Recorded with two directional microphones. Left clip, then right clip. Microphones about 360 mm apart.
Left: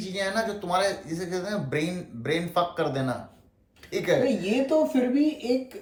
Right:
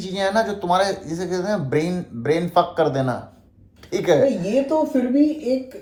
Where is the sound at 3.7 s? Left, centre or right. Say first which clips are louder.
Right 6 dB; centre.